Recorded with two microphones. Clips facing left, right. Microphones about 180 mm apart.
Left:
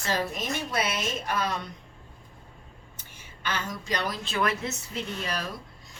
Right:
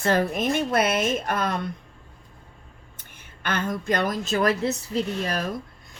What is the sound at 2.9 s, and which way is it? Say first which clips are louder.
A woman's voice: even; 55° right (ahead or behind).